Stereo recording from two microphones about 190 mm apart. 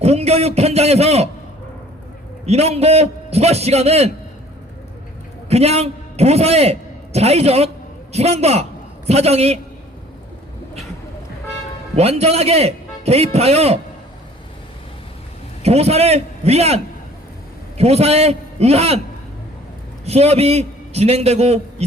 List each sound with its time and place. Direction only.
0.0 s a man's voice: 35° right (ahead or behind)
2.5 s a man's voice: 35° right (ahead or behind)
5.5 s a man's voice: 35° right (ahead or behind)
11.9 s a man's voice: 35° right (ahead or behind)
15.6 s a man's voice: 35° right (ahead or behind)
20.1 s a man's voice: 35° right (ahead or behind)